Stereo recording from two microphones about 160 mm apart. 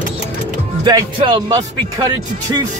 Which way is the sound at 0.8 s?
25° right (ahead or behind).